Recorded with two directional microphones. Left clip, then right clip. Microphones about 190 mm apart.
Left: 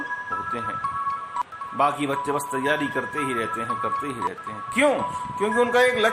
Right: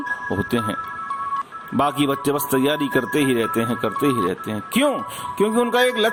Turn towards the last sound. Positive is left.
turn(degrees=-45)  # may be behind; listen again after turning